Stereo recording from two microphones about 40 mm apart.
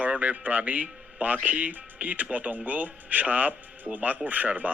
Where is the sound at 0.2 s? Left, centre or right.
Right.